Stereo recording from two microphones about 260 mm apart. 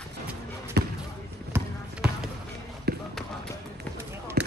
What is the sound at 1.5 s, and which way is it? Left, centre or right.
Basketball bounce, centre.